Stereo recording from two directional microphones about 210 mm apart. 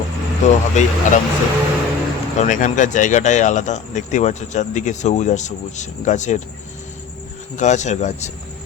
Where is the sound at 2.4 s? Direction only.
35° left (ahead or behind).